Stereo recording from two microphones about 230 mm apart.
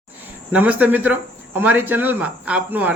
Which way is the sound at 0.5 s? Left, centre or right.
Centre.